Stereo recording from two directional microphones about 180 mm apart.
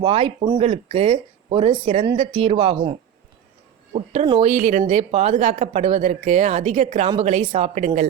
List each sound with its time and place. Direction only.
0.0 s speech: 30° right (ahead or behind)
3.9 s speech: 35° right (ahead or behind)